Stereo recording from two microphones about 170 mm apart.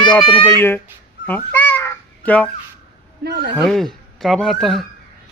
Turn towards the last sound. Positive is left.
turn(degrees=0)  # may be behind; listen again after turning